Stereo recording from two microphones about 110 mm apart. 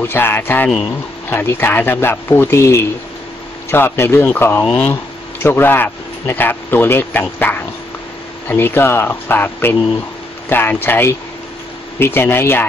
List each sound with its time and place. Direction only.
0.0 s speech: 20° left (ahead or behind)